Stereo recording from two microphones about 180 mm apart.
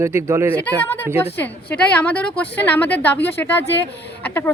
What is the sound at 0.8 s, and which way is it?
A woman's voice, 10° left (ahead or behind).